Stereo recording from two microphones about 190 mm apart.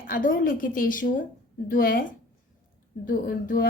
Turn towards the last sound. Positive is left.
turn(degrees=50)  # may be behind; listen again after turning